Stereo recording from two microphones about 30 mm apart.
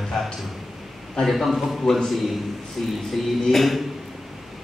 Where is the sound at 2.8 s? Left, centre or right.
Centre.